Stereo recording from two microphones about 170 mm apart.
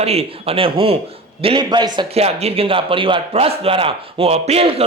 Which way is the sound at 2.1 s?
35° right (ahead or behind).